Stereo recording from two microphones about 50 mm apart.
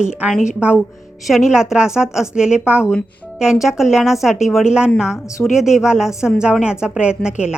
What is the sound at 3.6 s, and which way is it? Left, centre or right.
A woman's voice, centre.